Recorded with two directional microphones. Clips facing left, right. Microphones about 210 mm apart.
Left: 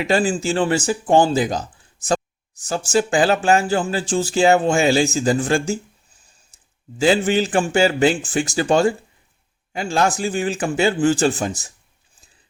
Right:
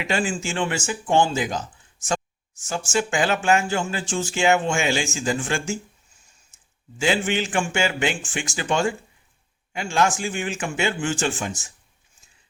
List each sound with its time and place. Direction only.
0.0 s speech: 35° left (ahead or behind)
6.5 s a sound: 35° left (ahead or behind)
7.0 s speech: 35° left (ahead or behind)